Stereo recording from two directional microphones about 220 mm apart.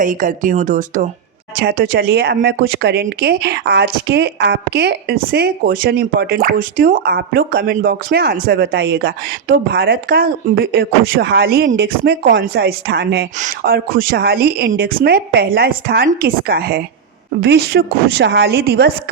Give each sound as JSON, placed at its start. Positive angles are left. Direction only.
{"t": 0.0, "sound": "speech", "side_deg": -40}